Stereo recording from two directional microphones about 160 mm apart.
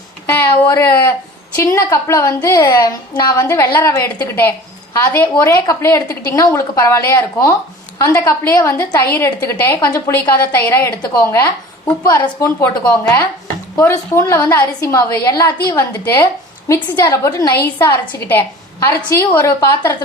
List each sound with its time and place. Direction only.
0.7 s a woman's voice: 15° left (ahead or behind)
18.0 s a woman's voice: 10° left (ahead or behind)